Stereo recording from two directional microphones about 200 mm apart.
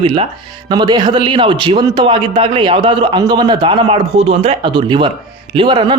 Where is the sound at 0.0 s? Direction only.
25° right (ahead or behind).